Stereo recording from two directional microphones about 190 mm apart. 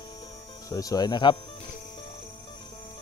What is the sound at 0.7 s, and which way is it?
Speech, 20° left (ahead or behind).